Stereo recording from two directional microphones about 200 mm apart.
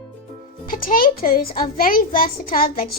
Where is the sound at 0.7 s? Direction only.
45° left (ahead or behind).